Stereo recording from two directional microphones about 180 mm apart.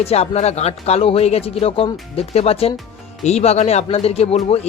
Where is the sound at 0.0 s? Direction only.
35° left (ahead or behind).